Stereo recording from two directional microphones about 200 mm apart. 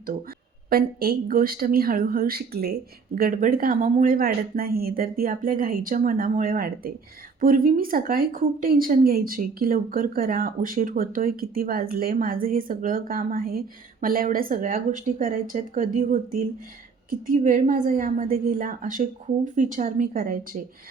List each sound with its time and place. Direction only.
0.7 s a woman's voice: 50° right (ahead or behind)